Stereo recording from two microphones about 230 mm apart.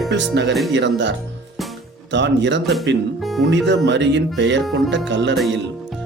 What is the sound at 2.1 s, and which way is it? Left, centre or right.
Speech, right.